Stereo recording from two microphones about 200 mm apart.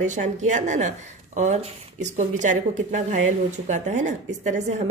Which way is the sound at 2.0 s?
35° right (ahead or behind).